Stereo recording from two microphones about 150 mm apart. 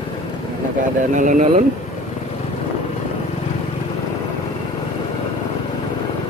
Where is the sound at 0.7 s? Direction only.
60° right (ahead or behind).